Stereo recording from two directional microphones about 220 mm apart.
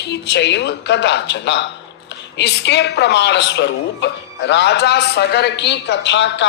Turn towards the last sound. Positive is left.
turn(degrees=55)  # may be behind; listen again after turning